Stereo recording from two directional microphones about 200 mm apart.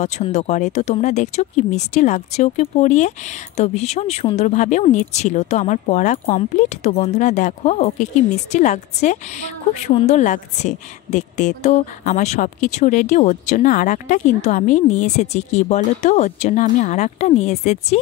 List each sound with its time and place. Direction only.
0.0 s speech: 35° left (ahead or behind)